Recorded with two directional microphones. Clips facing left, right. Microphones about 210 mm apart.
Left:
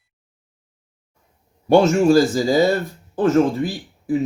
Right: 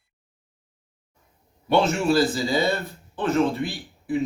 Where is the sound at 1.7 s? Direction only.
45° left (ahead or behind).